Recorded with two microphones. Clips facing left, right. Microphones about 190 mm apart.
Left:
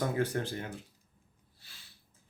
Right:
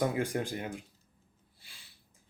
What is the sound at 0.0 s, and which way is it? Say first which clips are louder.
Speech: right 1 dB; 15° right (ahead or behind).